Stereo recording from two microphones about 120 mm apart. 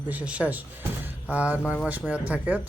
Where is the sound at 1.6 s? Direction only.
10° left (ahead or behind).